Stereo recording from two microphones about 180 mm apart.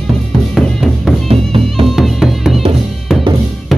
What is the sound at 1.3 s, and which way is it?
Music, 30° right (ahead or behind).